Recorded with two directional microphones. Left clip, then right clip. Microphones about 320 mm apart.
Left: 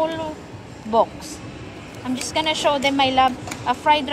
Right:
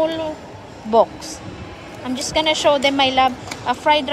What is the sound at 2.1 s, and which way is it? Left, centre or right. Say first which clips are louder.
A woman's voice: right 4 dB; centre.